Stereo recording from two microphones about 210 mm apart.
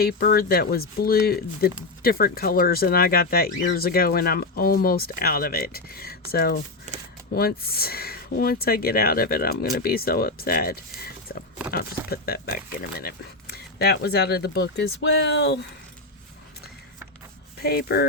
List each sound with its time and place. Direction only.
0.0 s speech: 45° left (ahead or behind)
17.6 s speech: 45° left (ahead or behind)